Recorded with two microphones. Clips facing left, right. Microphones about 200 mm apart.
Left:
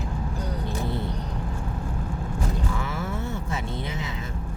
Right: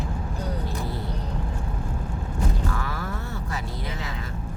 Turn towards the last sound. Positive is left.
turn(degrees=20)  # may be behind; listen again after turning